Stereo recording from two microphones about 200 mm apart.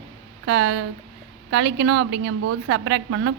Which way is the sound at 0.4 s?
65° right (ahead or behind).